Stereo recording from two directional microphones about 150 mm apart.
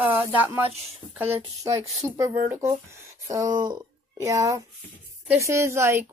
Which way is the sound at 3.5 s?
30° right (ahead or behind).